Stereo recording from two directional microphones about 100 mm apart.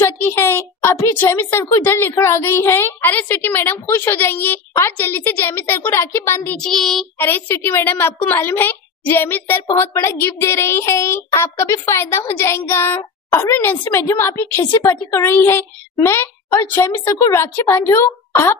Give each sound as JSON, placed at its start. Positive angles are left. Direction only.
{"t": 0.4, "sound": "a woman's voice", "side_deg": 20}
{"t": 6.6, "sound": "child singing", "side_deg": 5}
{"t": 7.2, "sound": "a woman's voice", "side_deg": 20}